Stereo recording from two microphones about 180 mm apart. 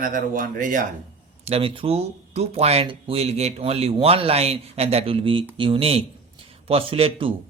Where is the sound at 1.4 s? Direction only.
30° right (ahead or behind).